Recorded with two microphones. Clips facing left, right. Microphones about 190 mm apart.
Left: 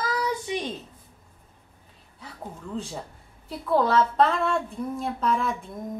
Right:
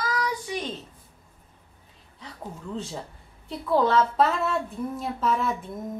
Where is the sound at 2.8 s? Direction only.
Centre (ahead or behind).